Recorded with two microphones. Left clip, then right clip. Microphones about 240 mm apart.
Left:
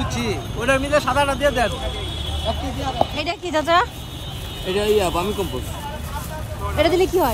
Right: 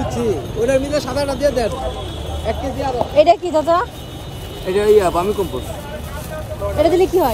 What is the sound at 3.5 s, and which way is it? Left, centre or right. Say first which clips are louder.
Speech: right 2 dB; left.